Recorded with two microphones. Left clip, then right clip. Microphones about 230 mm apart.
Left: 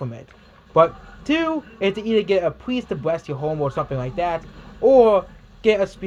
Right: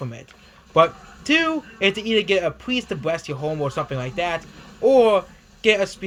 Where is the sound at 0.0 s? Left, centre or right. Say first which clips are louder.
Left 1 dB; centre.